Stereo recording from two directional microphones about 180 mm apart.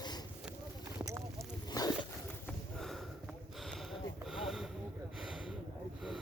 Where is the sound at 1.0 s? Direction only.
15° right (ahead or behind).